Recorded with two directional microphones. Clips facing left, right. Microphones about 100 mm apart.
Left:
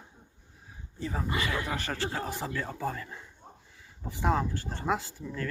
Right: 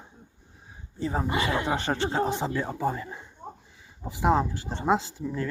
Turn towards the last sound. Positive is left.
turn(degrees=-20)  # may be behind; listen again after turning